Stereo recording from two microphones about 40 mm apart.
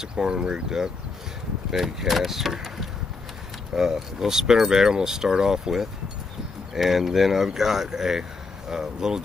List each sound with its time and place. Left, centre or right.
0.0 s speech: centre
3.7 s speech: centre